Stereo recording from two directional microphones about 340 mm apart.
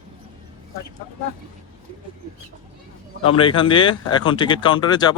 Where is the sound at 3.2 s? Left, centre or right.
Centre.